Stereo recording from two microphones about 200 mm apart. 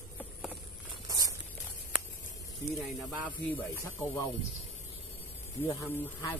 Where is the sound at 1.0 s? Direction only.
20° right (ahead or behind).